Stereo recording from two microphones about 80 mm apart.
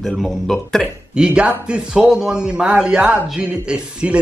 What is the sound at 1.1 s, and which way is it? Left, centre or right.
A man's voice, centre.